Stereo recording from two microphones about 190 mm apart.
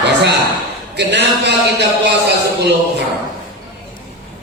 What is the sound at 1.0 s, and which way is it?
A man's voice, 60° right (ahead or behind).